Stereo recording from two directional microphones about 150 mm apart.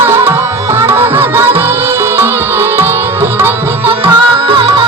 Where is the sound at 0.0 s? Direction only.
15° right (ahead or behind).